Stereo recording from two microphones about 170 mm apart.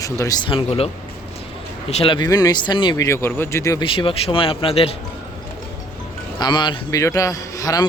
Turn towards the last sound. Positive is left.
turn(degrees=20)  # may be behind; listen again after turning